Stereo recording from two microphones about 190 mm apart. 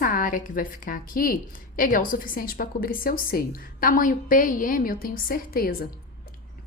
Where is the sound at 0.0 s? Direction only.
45° left (ahead or behind).